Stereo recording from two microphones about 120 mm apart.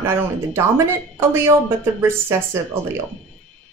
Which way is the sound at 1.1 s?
20° right (ahead or behind).